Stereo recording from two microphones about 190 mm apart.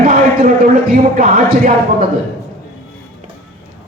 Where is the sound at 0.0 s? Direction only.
50° right (ahead or behind).